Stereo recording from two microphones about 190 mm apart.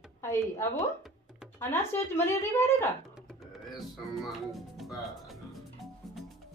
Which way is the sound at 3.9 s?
Centre (ahead or behind).